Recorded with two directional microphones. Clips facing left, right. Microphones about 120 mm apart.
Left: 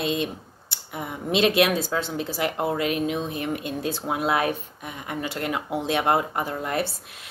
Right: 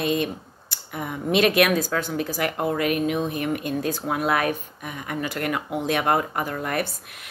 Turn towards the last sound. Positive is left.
turn(degrees=25)  # may be behind; listen again after turning